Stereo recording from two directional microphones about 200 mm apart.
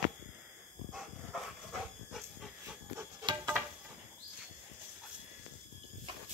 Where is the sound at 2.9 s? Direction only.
20° right (ahead or behind).